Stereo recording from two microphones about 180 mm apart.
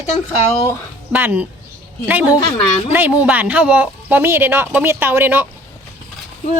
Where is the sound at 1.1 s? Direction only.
10° right (ahead or behind).